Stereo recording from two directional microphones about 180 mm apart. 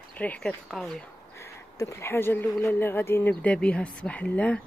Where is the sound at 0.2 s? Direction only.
10° left (ahead or behind).